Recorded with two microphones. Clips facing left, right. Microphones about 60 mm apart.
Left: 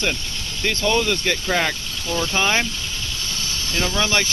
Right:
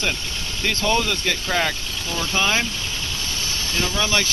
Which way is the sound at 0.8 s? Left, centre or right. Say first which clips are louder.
Left 2 dB; centre.